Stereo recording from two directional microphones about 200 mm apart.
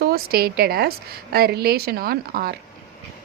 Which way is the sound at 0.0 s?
50° right (ahead or behind).